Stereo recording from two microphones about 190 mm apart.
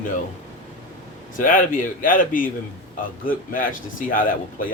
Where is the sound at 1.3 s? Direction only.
45° left (ahead or behind).